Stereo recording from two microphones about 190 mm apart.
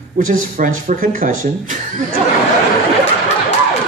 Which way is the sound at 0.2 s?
45° right (ahead or behind).